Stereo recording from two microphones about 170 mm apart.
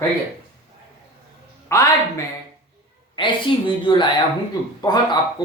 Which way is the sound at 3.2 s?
30° left (ahead or behind).